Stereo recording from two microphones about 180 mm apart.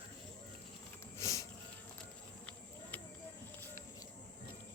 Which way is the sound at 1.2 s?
15° left (ahead or behind).